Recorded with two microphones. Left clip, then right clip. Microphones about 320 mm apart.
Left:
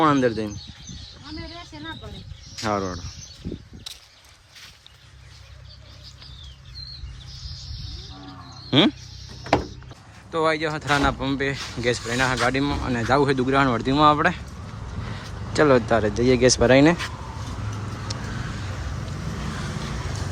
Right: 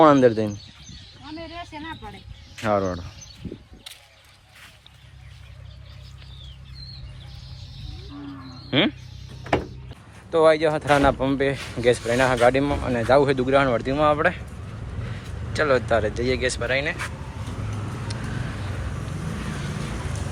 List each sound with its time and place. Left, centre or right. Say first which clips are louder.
0.0 s speech: right 5 dB; centre
2.6 s speech: right 3 dB; centre
3.9 s a sound: left 3 dB; centre
8.7 s a sound: left 2 dB; centre
10.3 s speech: right 5 dB; centre
15.5 s speech: left 2 dB; centre
18.1 s vehicle: left 4 dB; centre